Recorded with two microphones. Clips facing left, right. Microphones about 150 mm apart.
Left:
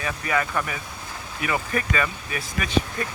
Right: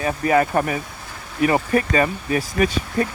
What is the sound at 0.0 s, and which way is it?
Speech, 40° right (ahead or behind).